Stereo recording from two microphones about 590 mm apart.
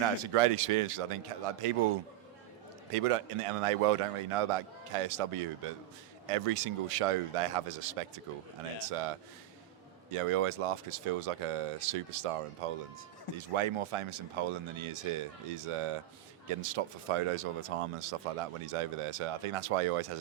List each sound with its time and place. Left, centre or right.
0.0 s speech: right